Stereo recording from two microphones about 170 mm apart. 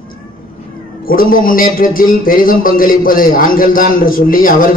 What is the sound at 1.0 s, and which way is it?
A man's voice, 55° left (ahead or behind).